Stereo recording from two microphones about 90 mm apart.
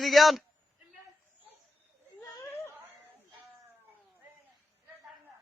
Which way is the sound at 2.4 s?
30° left (ahead or behind).